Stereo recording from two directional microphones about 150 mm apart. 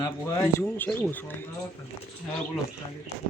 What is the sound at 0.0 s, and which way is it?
Speech, 20° left (ahead or behind).